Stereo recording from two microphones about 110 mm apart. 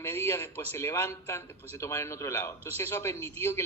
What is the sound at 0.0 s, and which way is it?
A man's voice, 25° left (ahead or behind).